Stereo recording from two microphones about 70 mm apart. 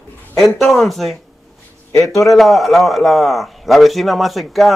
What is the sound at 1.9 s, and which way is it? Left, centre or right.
Speech, left.